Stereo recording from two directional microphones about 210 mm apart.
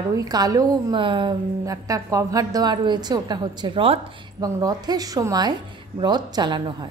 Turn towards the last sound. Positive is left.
turn(degrees=-20)  # may be behind; listen again after turning